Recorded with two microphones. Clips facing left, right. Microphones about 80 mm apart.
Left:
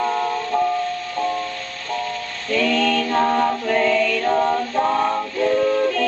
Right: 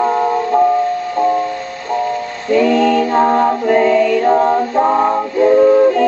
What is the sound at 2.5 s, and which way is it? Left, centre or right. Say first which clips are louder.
Music: right 8 dB; centre.